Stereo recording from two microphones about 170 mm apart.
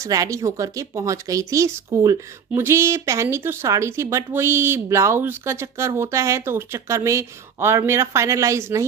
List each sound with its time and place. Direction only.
0.0 s speech: 20° right (ahead or behind)